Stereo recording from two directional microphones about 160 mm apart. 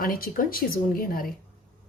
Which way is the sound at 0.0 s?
65° left (ahead or behind).